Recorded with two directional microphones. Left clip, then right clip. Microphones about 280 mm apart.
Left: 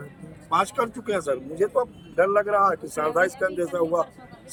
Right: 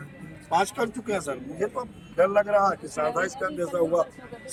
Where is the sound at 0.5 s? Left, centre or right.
Centre.